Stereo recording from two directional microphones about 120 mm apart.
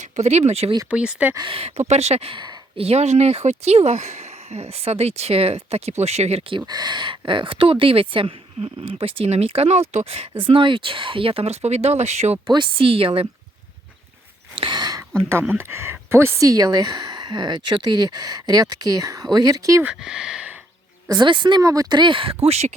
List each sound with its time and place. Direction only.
0.0 s speech: 65° right (ahead or behind)
0.9 s speech: 10° right (ahead or behind)
1.4 s speech: 50° right (ahead or behind)
2.3 s a sound: 40° right (ahead or behind)
2.8 s speech: 65° right (ahead or behind)
6.7 s a woman's voice: 35° right (ahead or behind); by 12.4 s 65° right (ahead or behind)
12.5 s a woman's voice: 45° right (ahead or behind)
14.6 s speech: 40° right (ahead or behind)
15.3 s speech: 20° right (ahead or behind)
19.8 s speech: 5° right (ahead or behind)
21.1 s a woman's voice: 40° right (ahead or behind); by 22.7 s 60° right (ahead or behind)